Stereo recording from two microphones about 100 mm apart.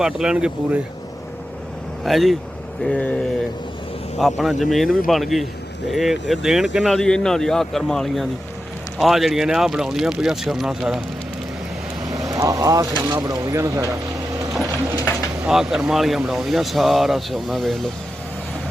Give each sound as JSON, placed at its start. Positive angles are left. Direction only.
{"t": 0.0, "sound": "speech", "side_deg": -5}
{"t": 2.0, "sound": "speech", "side_deg": 0}
{"t": 2.8, "sound": "speech", "side_deg": 10}
{"t": 4.2, "sound": "speech", "side_deg": 0}
{"t": 12.0, "sound": "vehicle", "side_deg": -5}
{"t": 12.3, "sound": "speech", "side_deg": -35}
{"t": 15.4, "sound": "speech", "side_deg": -5}